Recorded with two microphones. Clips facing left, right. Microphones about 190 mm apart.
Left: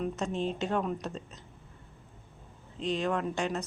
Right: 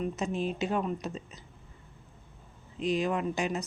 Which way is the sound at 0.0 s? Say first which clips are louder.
Even; 5° right (ahead or behind).